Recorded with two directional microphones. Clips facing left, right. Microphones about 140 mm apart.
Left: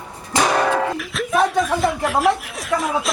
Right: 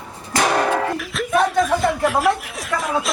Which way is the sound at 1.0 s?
Centre (ahead or behind).